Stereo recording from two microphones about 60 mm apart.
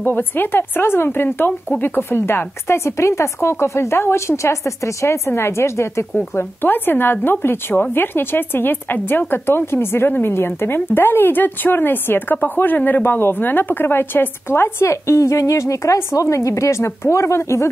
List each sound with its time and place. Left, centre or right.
0.0 s a woman's voice: left
6.3 s a woman's voice: left